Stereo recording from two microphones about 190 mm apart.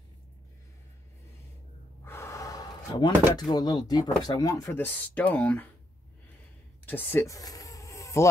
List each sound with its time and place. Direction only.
2.0 s gasp: 15° left (ahead or behind)
3.3 s speech: 20° left (ahead or behind)
6.9 s a sound: 10° left (ahead or behind)